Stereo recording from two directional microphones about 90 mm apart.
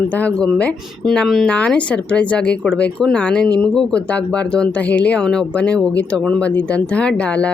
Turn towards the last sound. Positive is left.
turn(degrees=10)  # may be behind; listen again after turning